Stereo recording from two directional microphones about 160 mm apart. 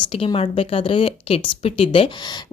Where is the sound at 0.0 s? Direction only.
35° left (ahead or behind).